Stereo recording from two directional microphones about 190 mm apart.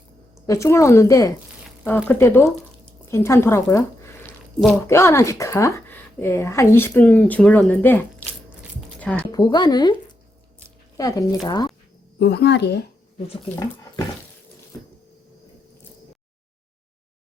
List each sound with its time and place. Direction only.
0.4 s speech: 15° left (ahead or behind)
9.0 s music: 5° left (ahead or behind)
9.3 s speech: 20° left (ahead or behind)
10.9 s speech: 20° left (ahead or behind)
12.2 s speech: 60° left (ahead or behind)